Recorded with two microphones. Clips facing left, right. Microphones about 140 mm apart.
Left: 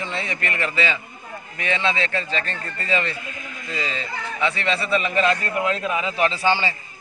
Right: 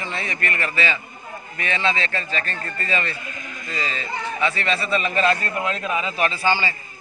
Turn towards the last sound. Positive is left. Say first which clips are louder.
# left 1 dB
turn(degrees=25)  # may be behind; listen again after turning